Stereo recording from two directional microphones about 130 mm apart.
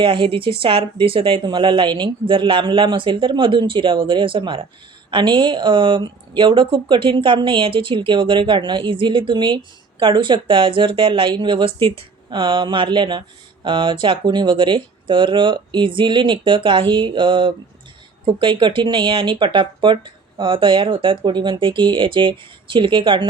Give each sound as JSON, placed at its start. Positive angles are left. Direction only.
{"t": 0.0, "sound": "speech", "side_deg": -40}